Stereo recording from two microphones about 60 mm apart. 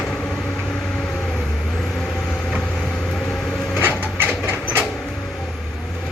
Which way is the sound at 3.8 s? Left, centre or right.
Right.